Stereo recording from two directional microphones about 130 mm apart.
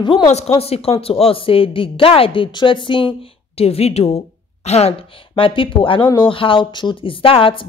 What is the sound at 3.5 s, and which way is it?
Speech, 50° left (ahead or behind).